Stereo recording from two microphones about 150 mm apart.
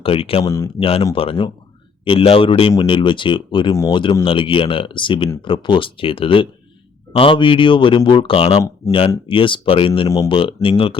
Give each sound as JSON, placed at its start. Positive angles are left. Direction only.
{"t": 0.0, "sound": "speech", "side_deg": 40}
{"t": 0.4, "sound": "speech", "side_deg": 20}
{"t": 0.8, "sound": "speech", "side_deg": 40}